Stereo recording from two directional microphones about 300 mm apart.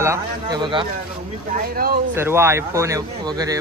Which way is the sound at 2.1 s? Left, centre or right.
Centre.